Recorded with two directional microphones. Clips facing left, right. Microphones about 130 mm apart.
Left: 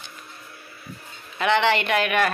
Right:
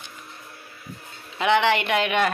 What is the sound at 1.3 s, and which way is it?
Speech, 15° right (ahead or behind).